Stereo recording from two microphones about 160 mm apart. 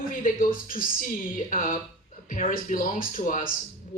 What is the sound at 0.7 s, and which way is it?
A woman's voice, 60° left (ahead or behind).